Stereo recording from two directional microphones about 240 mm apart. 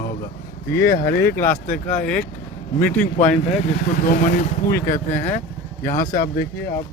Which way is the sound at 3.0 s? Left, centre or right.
Left.